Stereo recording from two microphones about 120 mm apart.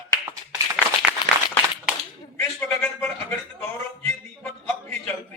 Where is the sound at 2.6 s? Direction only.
15° left (ahead or behind).